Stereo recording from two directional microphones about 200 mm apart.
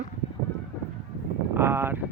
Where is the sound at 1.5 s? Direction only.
10° right (ahead or behind).